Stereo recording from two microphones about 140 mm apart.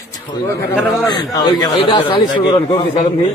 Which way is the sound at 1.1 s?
30° left (ahead or behind).